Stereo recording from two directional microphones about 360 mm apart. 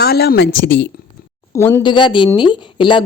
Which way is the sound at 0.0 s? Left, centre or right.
Left.